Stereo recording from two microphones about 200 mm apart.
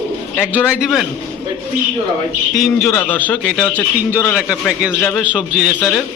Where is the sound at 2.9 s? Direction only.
10° left (ahead or behind).